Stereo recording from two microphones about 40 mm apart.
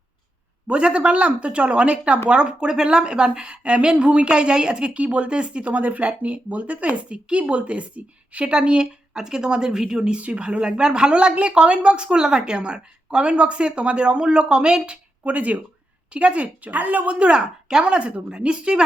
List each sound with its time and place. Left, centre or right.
0.7 s a woman's voice: right
8.4 s a woman's voice: right
10.2 s a woman's voice: right
15.2 s a woman's voice: right
17.2 s a woman's voice: right